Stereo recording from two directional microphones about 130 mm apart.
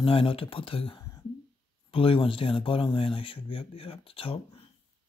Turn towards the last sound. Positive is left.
turn(degrees=45)  # may be behind; listen again after turning